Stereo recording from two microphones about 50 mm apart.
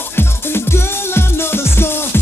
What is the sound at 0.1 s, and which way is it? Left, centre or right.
Music, left.